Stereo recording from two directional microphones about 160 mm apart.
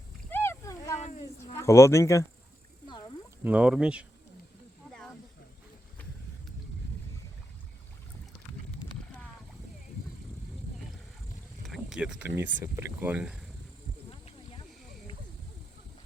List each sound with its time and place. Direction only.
0.3 s a sound: 15° left (ahead or behind)
1.5 s speech: 15° left (ahead or behind)
2.8 s cat: 25° left (ahead or behind)
3.4 s speech: 5° right (ahead or behind)
11.6 s speech: centre (ahead or behind)